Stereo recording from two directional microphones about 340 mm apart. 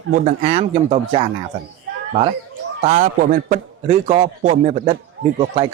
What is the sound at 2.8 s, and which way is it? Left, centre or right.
A man's voice, right.